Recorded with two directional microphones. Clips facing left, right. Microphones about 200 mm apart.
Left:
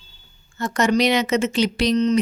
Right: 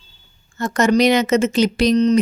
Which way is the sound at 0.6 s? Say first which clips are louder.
Right 4 dB; 45° right (ahead or behind).